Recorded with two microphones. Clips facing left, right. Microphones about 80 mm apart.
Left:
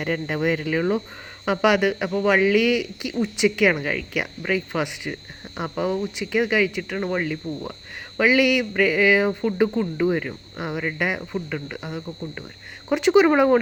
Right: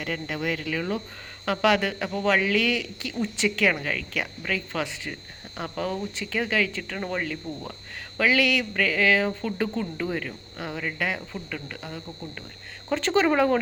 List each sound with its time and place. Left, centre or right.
0.0 s speech: left
1.5 s cricket: centre